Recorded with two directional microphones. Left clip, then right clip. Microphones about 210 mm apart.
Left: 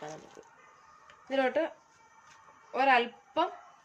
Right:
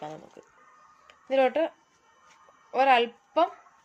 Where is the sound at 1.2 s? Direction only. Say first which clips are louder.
Right 5 dB; 40° right (ahead or behind).